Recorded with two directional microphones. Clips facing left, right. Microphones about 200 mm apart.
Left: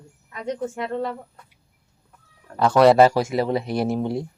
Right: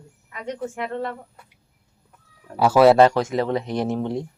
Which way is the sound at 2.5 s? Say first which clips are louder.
Right 1 dB; 10° right (ahead or behind).